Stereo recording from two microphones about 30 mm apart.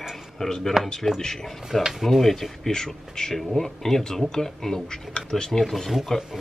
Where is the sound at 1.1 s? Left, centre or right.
Centre.